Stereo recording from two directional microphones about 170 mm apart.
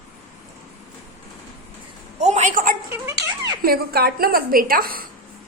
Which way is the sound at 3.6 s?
60° right (ahead or behind).